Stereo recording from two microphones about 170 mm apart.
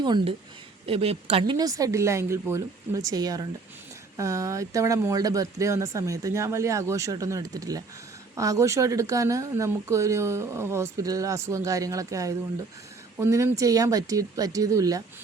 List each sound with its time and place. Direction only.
0.0 s speech: 25° right (ahead or behind)